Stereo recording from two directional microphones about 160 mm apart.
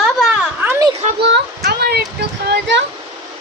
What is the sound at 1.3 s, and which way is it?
Speech, 85° right.